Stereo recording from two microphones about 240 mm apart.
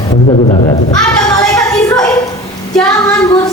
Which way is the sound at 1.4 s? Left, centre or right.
Centre.